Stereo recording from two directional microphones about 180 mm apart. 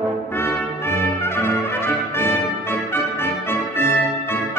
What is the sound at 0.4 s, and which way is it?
Brass instrument, 10° left (ahead or behind).